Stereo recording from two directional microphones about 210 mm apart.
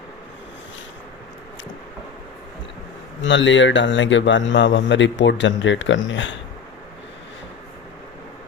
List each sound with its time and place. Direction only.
3.2 s speech: 60° left (ahead or behind)